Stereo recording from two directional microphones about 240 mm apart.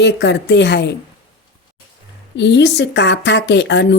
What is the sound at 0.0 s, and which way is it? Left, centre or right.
Speech, left.